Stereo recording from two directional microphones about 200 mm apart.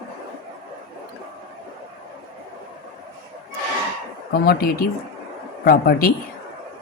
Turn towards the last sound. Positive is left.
turn(degrees=45)  # may be behind; listen again after turning